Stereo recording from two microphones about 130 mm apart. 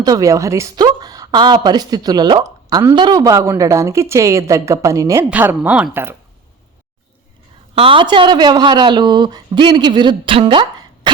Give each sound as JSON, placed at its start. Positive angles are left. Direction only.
{"t": 0.0, "sound": "a woman's voice", "side_deg": -30}
{"t": 7.8, "sound": "speech", "side_deg": -40}